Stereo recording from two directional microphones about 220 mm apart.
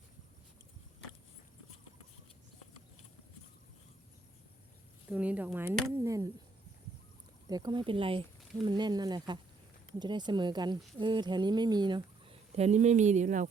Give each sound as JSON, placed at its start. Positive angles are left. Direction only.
{"t": 5.1, "sound": "speech", "side_deg": -5}
{"t": 6.0, "sound": "a sound", "side_deg": -15}
{"t": 7.4, "sound": "speech", "side_deg": -15}